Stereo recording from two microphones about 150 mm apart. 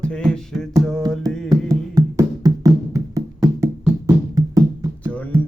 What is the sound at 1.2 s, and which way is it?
Music, 25° right (ahead or behind).